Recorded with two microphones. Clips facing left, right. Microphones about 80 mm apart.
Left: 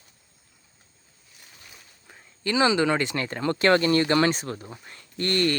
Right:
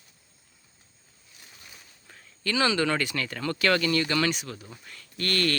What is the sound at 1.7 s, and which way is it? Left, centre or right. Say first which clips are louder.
Speech: left 1 dB; centre.